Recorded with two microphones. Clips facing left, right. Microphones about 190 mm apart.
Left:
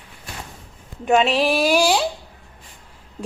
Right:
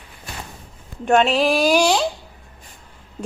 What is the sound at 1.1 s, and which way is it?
Speech, centre (ahead or behind).